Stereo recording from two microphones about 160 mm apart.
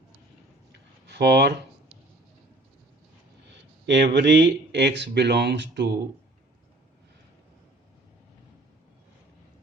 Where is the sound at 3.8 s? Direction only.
90° right.